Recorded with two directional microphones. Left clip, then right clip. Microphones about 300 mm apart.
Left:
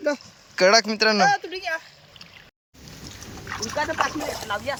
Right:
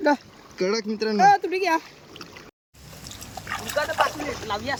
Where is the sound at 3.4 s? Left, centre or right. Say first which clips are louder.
Even; centre.